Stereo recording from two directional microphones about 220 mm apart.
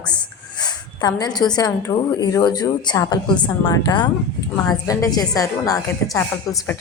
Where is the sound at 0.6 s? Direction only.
20° left (ahead or behind).